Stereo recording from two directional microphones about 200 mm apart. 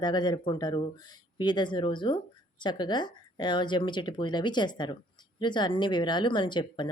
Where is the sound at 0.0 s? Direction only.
20° left (ahead or behind).